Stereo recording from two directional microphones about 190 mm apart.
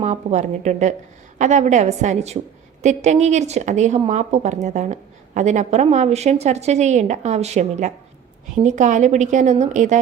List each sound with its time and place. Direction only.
0.0 s speech: 40° right (ahead or behind)